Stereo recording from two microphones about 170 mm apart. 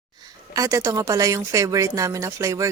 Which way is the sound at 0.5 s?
20° right (ahead or behind).